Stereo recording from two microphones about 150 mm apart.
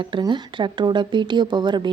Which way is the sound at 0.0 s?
30° right (ahead or behind).